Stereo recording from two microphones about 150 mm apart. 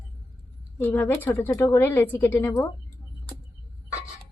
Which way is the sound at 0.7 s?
15° left (ahead or behind).